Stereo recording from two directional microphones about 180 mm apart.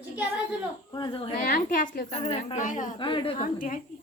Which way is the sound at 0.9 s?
25° left (ahead or behind).